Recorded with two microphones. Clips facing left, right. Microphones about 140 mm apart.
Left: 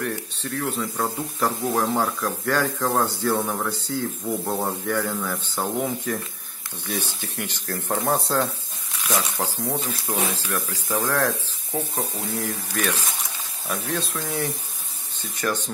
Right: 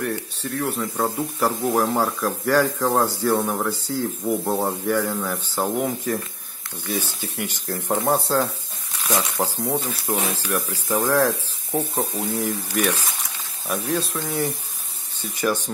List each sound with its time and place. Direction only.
0.0 s speech: 5° right (ahead or behind)
9.4 s speech: 15° right (ahead or behind)